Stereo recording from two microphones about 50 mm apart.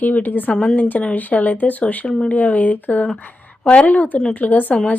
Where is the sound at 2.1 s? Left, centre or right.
Centre.